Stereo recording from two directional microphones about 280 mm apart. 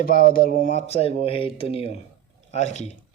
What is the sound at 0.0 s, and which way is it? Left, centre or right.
Speech, left.